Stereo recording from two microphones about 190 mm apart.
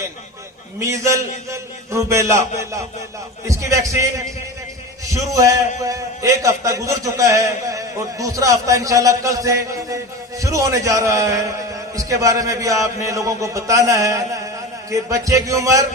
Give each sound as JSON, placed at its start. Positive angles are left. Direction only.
{"t": 0.8, "sound": "a man's voice", "side_deg": -15}
{"t": 5.3, "sound": "a man's voice", "side_deg": -15}